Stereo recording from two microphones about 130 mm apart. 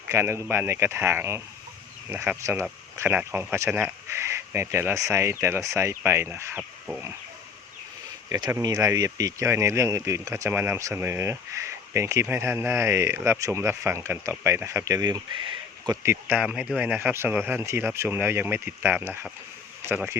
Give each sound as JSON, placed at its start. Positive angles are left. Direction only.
{"t": 0.1, "sound": "speech", "side_deg": -20}
{"t": 6.6, "sound": "speech", "side_deg": 0}
{"t": 8.4, "sound": "speech", "side_deg": -20}
{"t": 16.2, "sound": "speech", "side_deg": -10}